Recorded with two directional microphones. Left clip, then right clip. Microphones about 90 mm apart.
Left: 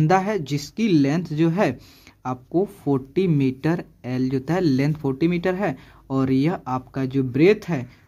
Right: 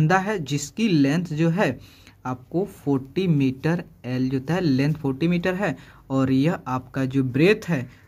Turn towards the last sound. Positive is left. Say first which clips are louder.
# left 2 dB
turn(degrees=15)  # may be behind; listen again after turning